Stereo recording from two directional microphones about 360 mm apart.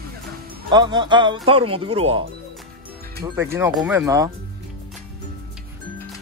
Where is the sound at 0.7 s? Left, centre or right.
Centre.